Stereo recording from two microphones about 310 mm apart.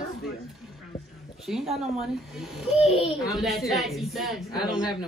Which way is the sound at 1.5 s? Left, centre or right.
Centre.